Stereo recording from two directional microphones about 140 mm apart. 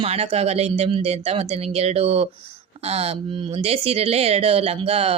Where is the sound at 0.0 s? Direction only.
45° right (ahead or behind).